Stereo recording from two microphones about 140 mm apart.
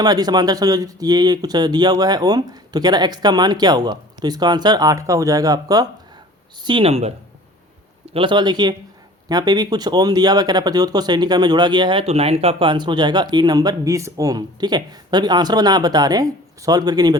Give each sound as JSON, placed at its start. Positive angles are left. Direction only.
{"t": 0.0, "sound": "speech", "side_deg": -30}
{"t": 6.7, "sound": "speech", "side_deg": -40}
{"t": 8.1, "sound": "speech", "side_deg": -35}